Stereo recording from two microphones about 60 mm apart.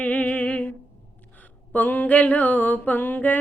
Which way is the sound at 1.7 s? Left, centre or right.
Left.